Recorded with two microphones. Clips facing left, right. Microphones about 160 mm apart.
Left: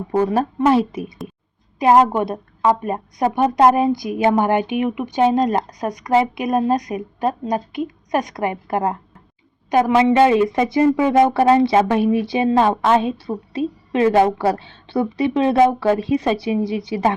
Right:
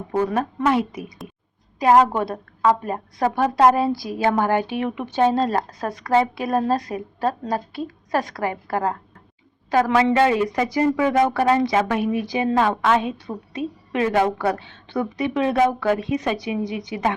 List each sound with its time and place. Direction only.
0.1 s speech: 30° left (ahead or behind)